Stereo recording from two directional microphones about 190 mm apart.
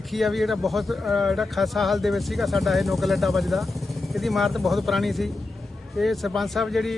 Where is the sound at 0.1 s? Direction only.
Centre (ahead or behind).